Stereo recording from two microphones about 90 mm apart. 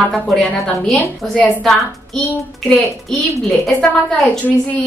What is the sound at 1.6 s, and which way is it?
A woman's voice, centre (ahead or behind).